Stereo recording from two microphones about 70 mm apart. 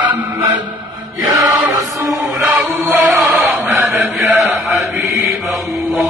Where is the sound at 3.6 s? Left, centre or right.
Right.